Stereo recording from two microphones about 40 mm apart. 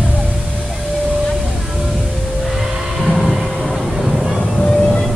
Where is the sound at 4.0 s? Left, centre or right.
Centre.